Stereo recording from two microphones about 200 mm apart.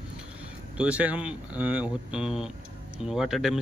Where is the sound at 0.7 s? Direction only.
5° right (ahead or behind).